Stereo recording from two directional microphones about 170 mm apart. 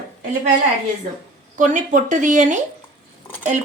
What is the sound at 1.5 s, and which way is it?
A woman's voice, 45° right (ahead or behind).